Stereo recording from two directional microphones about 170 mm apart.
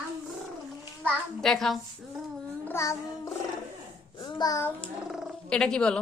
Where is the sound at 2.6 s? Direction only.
15° left (ahead or behind).